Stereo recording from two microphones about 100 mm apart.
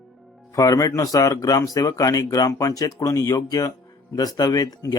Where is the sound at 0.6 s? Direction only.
35° left (ahead or behind).